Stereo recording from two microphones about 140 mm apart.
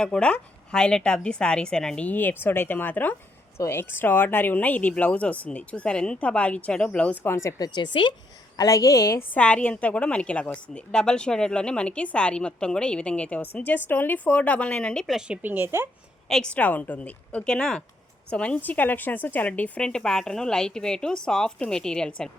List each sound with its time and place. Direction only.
0.0 s speech: 5° left (ahead or behind)
7.8 s speech: 35° left (ahead or behind)
8.5 s a woman's voice: 25° left (ahead or behind)
9.4 s speech: 10° left (ahead or behind); by 15.9 s 15° right (ahead or behind)
16.3 s speech: 5° left (ahead or behind)